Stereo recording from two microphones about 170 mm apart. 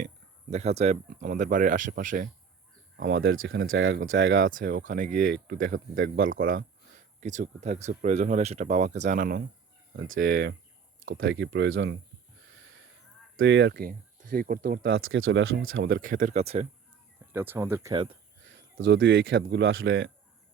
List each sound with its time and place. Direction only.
0.5 s speech: 40° right (ahead or behind)
3.6 s speech: 90° right
4.4 s speech: 55° right (ahead or behind)
10.2 s speech: 90° right
13.4 s speech: 90° right; by 14.9 s 60° right (ahead or behind)
15.4 s speech: 90° right
16.1 s speech: 45° right (ahead or behind)
17.3 s speech: 10° right (ahead or behind)
17.9 s speech: 30° right (ahead or behind)
18.4 s speech: 90° right